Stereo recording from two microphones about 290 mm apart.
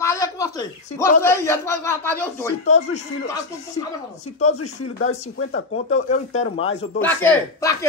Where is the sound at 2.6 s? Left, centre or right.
Left.